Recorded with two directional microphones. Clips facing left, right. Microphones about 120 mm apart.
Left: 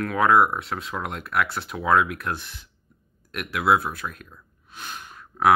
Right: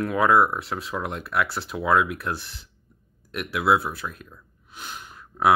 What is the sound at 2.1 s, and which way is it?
Speech, 30° right (ahead or behind).